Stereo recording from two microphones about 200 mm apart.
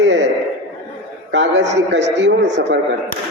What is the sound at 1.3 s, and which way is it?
A man's voice, 60° right (ahead or behind).